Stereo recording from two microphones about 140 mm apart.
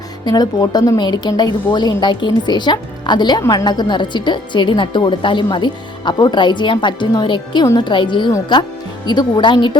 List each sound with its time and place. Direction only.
0.3 s a woman's voice: 30° left (ahead or behind)